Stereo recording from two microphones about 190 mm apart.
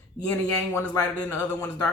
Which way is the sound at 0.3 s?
10° left (ahead or behind).